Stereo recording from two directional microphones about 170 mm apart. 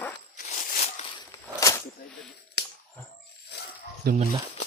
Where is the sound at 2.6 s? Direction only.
75° left (ahead or behind).